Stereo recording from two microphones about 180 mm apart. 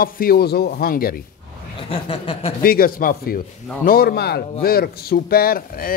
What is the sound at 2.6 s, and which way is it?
Speech, 55° left (ahead or behind).